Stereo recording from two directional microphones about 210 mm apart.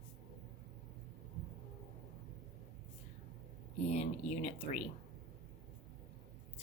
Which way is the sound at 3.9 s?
30° left (ahead or behind).